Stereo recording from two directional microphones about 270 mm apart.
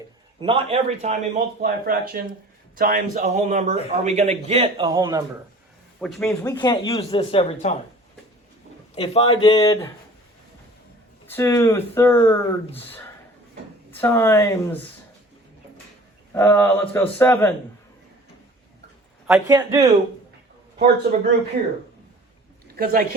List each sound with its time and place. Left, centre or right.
0.3 s a man's voice: centre
6.0 s a man's voice: centre
6.4 s speech: centre
9.0 s speech: left
11.3 s speech: centre
16.3 s speech: centre
19.3 s speech: centre
22.8 s speech: right